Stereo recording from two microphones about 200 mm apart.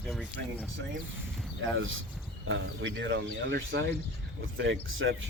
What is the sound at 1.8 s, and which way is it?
Speech, 80° right.